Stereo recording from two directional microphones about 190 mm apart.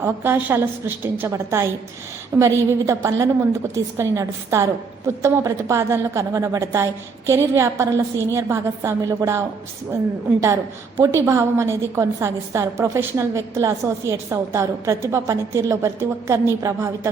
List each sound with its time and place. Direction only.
0.0 s a woman's voice: 10° right (ahead or behind)
10.4 s a woman's voice: 15° right (ahead or behind)